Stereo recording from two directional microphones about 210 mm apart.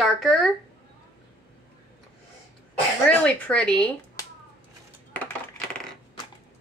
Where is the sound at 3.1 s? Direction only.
5° left (ahead or behind).